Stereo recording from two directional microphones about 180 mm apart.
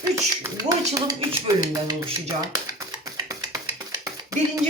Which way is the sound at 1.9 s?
20° right (ahead or behind).